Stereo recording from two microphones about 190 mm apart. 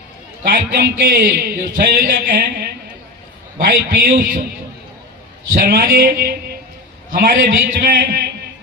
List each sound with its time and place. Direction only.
0.4 s a man's voice: 50° right (ahead or behind)
5.5 s a man's voice: 50° right (ahead or behind)